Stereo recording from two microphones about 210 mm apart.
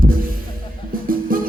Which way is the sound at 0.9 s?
40° right (ahead or behind).